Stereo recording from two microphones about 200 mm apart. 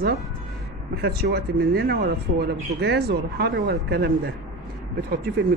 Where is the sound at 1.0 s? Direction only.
55° right (ahead or behind).